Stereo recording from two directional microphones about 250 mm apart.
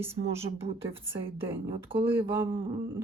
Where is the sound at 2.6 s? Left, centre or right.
Centre.